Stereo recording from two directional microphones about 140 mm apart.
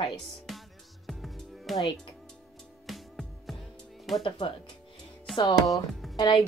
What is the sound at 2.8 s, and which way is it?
Music, centre (ahead or behind).